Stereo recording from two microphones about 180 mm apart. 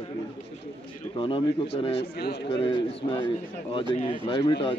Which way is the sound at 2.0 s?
65° left (ahead or behind).